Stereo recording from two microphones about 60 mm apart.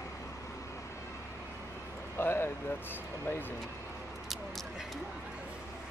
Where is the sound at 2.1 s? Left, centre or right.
Left.